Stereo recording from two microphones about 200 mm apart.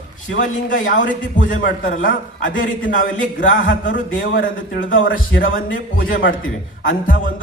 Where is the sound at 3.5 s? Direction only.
75° left (ahead or behind).